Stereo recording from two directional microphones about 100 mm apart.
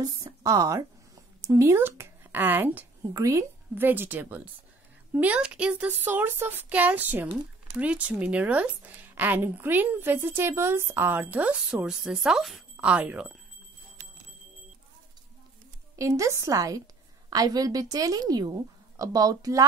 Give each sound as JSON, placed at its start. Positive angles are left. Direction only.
{"t": 0.0, "sound": "a woman's voice", "side_deg": -35}
{"t": 3.1, "sound": "a woman's voice", "side_deg": -35}
{"t": 3.7, "sound": "a woman's voice", "side_deg": -20}
{"t": 16.0, "sound": "a woman's voice", "side_deg": -30}